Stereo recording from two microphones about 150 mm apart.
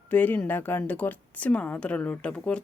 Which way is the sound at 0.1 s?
10° left (ahead or behind).